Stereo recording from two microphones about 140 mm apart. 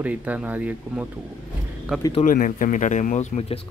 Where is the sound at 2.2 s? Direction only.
70° left (ahead or behind); by 3.6 s 45° left (ahead or behind).